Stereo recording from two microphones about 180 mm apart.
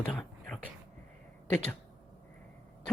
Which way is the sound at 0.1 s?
5° left (ahead or behind).